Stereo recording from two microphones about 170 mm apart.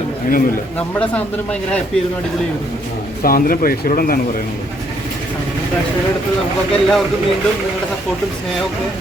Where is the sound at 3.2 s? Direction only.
60° left (ahead or behind).